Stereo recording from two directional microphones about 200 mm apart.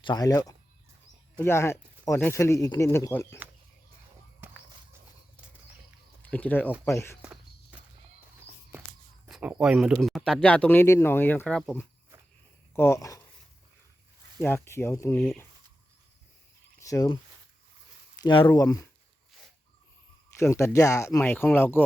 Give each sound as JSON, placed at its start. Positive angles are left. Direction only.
{"t": 0.0, "sound": "speech", "side_deg": 20}
{"t": 4.4, "sound": "walk", "side_deg": -10}
{"t": 6.3, "sound": "speech", "side_deg": 10}
{"t": 7.2, "sound": "walk", "side_deg": -5}
{"t": 9.3, "sound": "speech", "side_deg": -5}
{"t": 14.3, "sound": "speech", "side_deg": 10}
{"t": 16.8, "sound": "speech", "side_deg": 15}
{"t": 18.2, "sound": "speech", "side_deg": 25}
{"t": 20.4, "sound": "speech", "side_deg": 15}